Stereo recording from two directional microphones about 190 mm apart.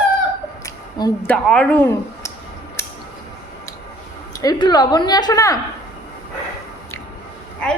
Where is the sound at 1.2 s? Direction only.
5° left (ahead or behind).